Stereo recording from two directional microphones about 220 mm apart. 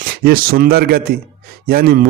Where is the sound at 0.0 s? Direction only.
40° right (ahead or behind).